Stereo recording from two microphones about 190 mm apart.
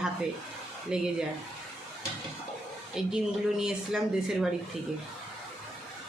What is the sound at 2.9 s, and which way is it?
Speech, 5° right (ahead or behind).